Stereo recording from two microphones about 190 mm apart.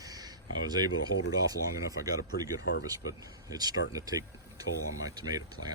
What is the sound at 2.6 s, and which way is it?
Speech, 65° left (ahead or behind).